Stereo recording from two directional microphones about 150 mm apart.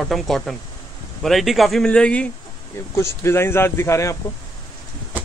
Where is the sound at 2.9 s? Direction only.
20° left (ahead or behind).